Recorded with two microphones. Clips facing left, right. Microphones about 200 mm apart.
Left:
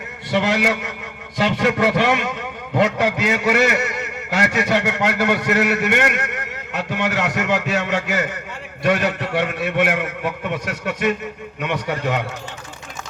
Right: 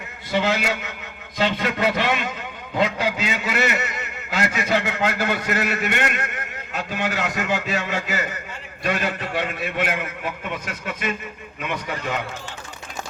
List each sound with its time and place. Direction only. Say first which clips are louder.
0.3 s a man's voice: left 3 dB; 75° left (ahead or behind)